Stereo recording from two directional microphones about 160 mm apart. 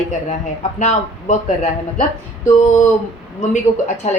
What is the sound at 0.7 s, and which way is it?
Speech, 50° left (ahead or behind).